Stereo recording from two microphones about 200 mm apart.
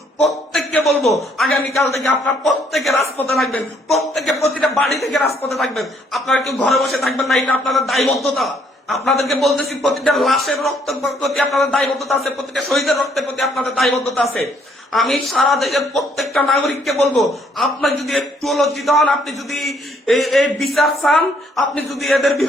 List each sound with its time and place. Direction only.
0.2 s a man's voice: centre (ahead or behind)